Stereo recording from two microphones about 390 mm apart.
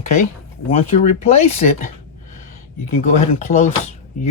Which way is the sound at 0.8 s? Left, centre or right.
Centre.